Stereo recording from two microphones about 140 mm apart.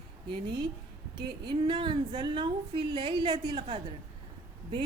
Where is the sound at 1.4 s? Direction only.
35° right (ahead or behind).